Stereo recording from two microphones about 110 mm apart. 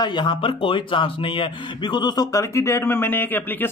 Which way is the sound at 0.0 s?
45° left (ahead or behind).